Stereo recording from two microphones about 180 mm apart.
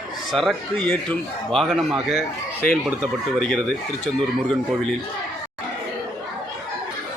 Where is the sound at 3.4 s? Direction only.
5° left (ahead or behind).